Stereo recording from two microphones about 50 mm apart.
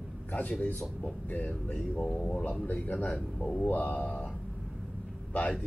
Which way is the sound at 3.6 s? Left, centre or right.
Left.